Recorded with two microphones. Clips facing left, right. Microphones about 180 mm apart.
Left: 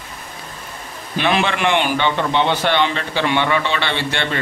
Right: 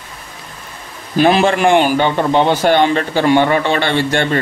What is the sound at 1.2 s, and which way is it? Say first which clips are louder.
A man's voice: right 7 dB; 40° right (ahead or behind).